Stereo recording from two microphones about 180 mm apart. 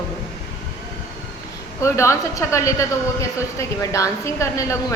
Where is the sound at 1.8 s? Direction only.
15° left (ahead or behind).